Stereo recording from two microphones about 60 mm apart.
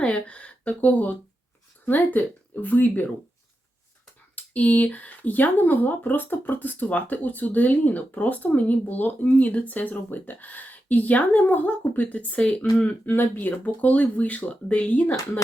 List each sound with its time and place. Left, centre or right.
0.0 s a sound: centre
1.8 s speech: left
4.4 s speech: left
12.8 s speech: left